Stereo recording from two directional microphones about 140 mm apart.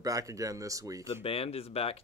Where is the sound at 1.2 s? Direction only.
45° left (ahead or behind).